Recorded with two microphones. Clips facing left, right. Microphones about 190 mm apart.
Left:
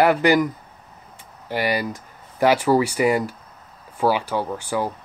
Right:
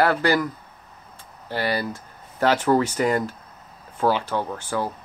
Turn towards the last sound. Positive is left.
turn(degrees=15)  # may be behind; listen again after turning